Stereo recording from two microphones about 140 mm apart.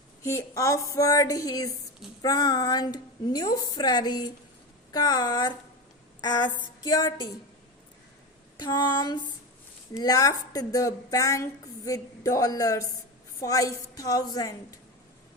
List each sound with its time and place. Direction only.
0.2 s a woman's voice: 20° left (ahead or behind)
8.5 s female singing: 30° left (ahead or behind)
9.9 s a woman's voice: 25° left (ahead or behind)